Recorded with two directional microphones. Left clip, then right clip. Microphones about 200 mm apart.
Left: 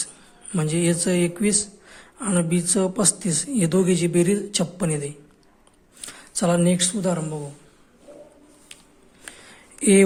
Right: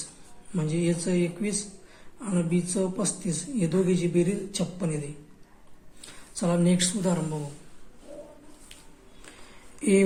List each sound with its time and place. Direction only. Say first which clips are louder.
0.5 s speech: left 5 dB; 45° left (ahead or behind)
6.4 s a woman's voice: left 5 dB; 35° left (ahead or behind)
9.3 s a sound: left 8 dB; 40° left (ahead or behind)